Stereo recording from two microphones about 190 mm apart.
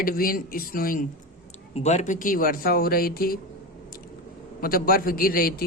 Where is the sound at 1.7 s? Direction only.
35° left (ahead or behind); by 3.4 s 50° left (ahead or behind).